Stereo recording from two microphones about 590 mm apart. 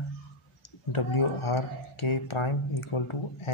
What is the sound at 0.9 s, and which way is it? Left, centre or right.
Speech, left.